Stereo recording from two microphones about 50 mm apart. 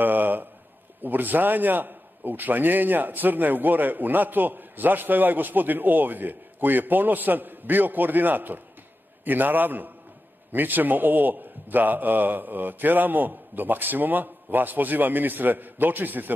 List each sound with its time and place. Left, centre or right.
0.0 s a man's voice: right